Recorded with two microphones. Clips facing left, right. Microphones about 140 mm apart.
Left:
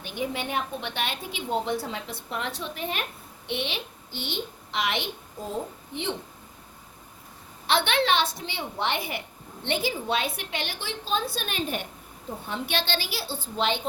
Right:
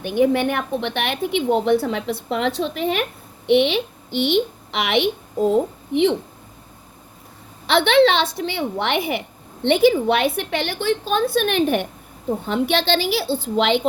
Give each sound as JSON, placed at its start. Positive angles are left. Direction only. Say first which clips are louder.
{"t": 0.1, "sound": "a woman's voice", "louder": "right 12 dB", "side_deg": -75}
{"t": 2.6, "sound": "a woman's voice", "louder": "right 10 dB", "side_deg": -90}
{"t": 3.5, "sound": "a woman's voice", "louder": "right 15 dB", "side_deg": -75}
{"t": 7.7, "sound": "a woman's voice", "louder": "right 9 dB", "side_deg": -70}
{"t": 12.5, "sound": "a woman's voice", "louder": "right 10 dB", "side_deg": -90}